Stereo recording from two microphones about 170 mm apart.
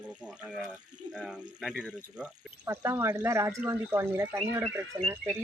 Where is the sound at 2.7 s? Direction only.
15° right (ahead or behind).